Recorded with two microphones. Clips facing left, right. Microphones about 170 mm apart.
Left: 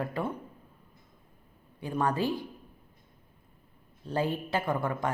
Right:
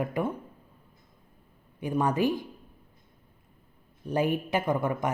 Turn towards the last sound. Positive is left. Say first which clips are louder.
# right 3 dB
turn(degrees=-20)  # may be behind; listen again after turning